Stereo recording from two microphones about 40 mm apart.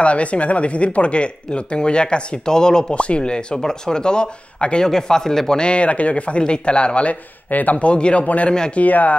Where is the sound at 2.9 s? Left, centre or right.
Left.